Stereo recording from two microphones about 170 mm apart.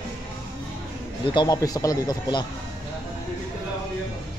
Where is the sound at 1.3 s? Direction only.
25° left (ahead or behind).